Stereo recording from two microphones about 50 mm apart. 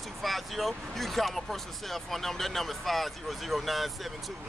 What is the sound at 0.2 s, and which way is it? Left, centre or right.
Speech, centre.